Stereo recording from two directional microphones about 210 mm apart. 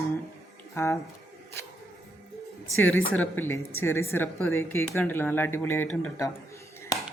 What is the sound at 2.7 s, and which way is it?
Speech, 70° left (ahead or behind).